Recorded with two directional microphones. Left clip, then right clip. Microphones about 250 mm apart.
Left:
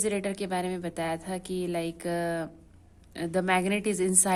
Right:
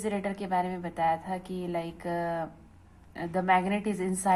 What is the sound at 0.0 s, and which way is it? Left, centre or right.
A woman's voice, left.